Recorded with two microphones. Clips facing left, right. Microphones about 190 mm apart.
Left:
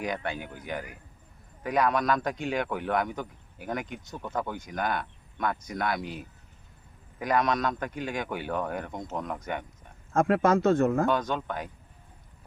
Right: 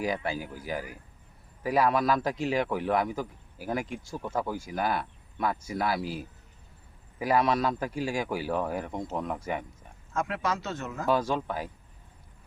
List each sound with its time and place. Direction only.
0.0 s a man's voice: 5° right (ahead or behind)
10.1 s a man's voice: 50° left (ahead or behind)
11.0 s a man's voice: 5° right (ahead or behind)